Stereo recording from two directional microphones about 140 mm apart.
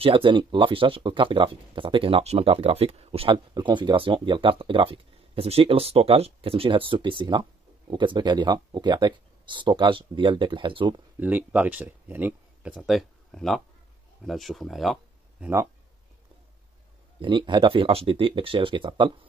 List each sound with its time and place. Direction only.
0.0 s speech: 35° right (ahead or behind)
11.1 s speech: 10° right (ahead or behind)
12.7 s speech: centre (ahead or behind)
17.2 s speech: 35° right (ahead or behind)